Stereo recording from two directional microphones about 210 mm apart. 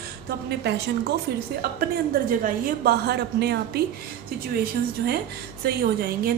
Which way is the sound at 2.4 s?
45° right (ahead or behind).